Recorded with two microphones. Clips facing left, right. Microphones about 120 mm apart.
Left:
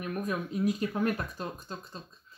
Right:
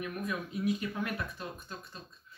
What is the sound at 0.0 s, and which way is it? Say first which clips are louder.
Speech: left 3 dB; 40° left (ahead or behind).